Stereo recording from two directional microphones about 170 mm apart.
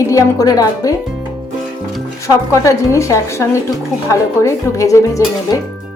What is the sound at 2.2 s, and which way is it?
A woman's voice, 20° left (ahead or behind).